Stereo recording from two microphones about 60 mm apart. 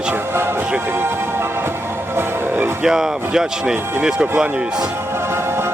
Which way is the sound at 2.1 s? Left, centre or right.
Right.